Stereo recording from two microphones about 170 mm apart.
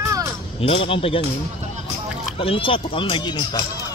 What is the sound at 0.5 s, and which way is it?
Speech, 35° left (ahead or behind).